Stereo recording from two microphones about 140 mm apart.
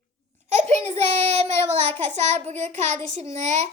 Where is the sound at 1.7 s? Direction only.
50° right (ahead or behind).